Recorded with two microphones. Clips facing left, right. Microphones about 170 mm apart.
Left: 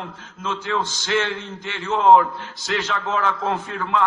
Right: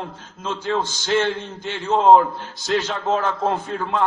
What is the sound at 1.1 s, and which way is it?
A man's voice, 40° right (ahead or behind).